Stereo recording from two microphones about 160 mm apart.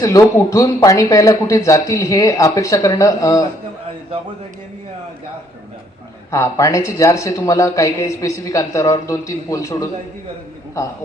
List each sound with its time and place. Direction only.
0.0 s a man's voice: 20° left (ahead or behind)
6.3 s a man's voice: 20° left (ahead or behind)